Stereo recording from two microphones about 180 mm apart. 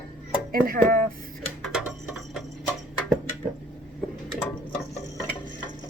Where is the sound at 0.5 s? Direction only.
55° right (ahead or behind).